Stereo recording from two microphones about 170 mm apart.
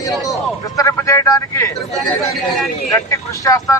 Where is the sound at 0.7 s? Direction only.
20° left (ahead or behind).